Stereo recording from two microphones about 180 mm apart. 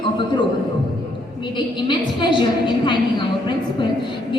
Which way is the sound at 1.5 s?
25° left (ahead or behind).